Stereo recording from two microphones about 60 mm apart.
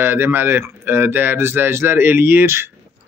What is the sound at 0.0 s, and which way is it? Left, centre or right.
Speech, right.